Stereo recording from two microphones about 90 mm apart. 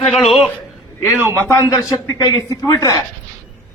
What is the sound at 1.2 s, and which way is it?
Speech, 30° right (ahead or behind).